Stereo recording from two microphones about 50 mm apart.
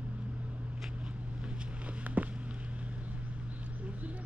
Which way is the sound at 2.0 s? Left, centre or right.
Right.